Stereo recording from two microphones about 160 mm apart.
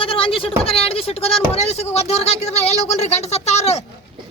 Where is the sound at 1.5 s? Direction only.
40° left (ahead or behind).